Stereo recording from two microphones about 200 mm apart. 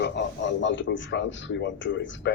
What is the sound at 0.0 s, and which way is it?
A man's voice, 60° left (ahead or behind).